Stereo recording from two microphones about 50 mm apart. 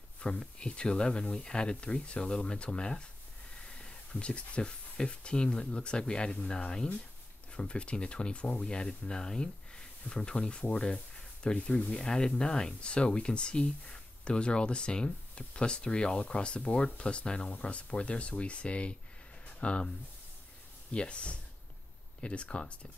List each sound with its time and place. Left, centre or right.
0.2 s speech: left
19.4 s a sound: left
20.9 s speech: left